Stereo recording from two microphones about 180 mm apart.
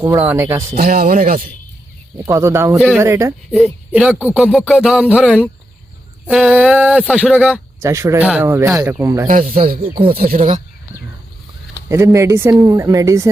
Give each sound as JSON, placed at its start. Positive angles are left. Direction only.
{"t": 0.1, "sound": "speech", "side_deg": -10}
{"t": 0.8, "sound": "speech", "side_deg": -55}
{"t": 2.1, "sound": "speech", "side_deg": -15}
{"t": 2.7, "sound": "music", "side_deg": -5}
{"t": 3.0, "sound": "speech", "side_deg": -15}
{"t": 4.5, "sound": "music", "side_deg": -5}
{"t": 6.2, "sound": "speech", "side_deg": -5}
{"t": 9.5, "sound": "speech", "side_deg": -50}
{"t": 11.9, "sound": "speech", "side_deg": -15}